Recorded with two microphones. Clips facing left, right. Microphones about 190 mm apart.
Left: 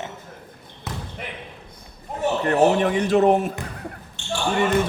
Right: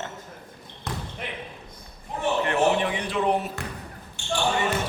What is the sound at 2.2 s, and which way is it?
Speech, 40° left (ahead or behind).